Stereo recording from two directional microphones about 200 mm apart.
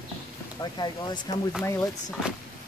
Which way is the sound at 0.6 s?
20° left (ahead or behind).